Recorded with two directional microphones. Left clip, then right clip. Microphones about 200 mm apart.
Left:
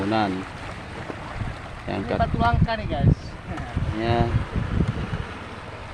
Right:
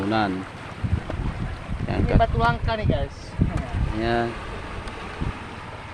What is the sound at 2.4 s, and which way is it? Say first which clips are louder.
Speech: even; 40° right (ahead or behind).